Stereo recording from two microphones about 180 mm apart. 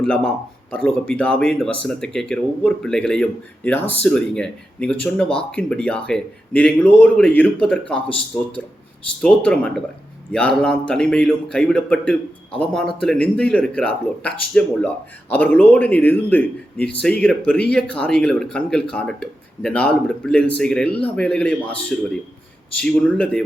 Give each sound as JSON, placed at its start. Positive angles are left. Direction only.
{"t": 0.0, "sound": "speech", "side_deg": 5}